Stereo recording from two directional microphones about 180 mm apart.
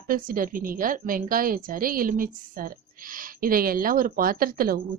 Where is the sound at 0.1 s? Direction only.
50° right (ahead or behind).